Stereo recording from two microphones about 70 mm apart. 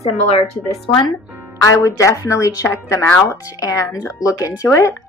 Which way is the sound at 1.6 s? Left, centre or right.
Left.